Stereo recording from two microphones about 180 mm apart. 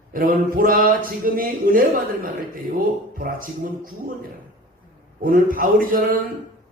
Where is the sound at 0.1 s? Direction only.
50° right (ahead or behind).